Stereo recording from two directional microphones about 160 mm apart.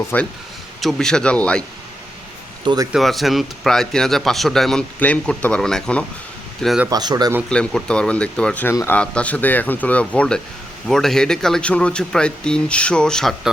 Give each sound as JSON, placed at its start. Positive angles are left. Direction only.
{"t": 0.1, "sound": "speech", "side_deg": 10}
{"t": 2.6, "sound": "a man's voice", "side_deg": -20}
{"t": 2.9, "sound": "speech", "side_deg": 0}
{"t": 6.9, "sound": "a man's voice", "side_deg": -25}
{"t": 7.5, "sound": "speech", "side_deg": 5}
{"t": 8.7, "sound": "speech", "side_deg": 20}
{"t": 9.0, "sound": "speech", "side_deg": 10}